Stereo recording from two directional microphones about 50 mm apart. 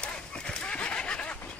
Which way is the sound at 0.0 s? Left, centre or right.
Centre.